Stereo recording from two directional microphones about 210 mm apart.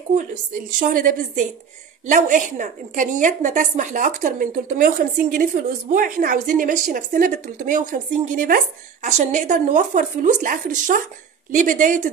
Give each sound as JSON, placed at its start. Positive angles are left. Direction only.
{"t": 0.7, "sound": "a woman's voice", "side_deg": -40}